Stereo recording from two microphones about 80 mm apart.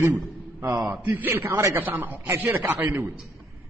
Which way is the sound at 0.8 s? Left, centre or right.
Centre.